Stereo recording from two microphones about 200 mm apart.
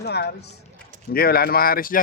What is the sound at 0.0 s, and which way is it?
Speech, 55° left (ahead or behind).